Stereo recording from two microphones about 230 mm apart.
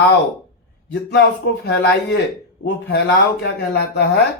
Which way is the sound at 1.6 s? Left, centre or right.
Left.